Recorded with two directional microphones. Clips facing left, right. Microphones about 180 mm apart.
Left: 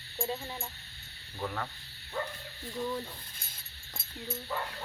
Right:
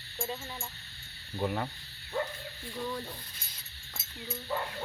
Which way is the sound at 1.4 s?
20° right (ahead or behind).